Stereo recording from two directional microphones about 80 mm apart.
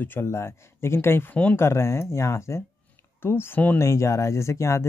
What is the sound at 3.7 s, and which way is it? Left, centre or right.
Speech, left.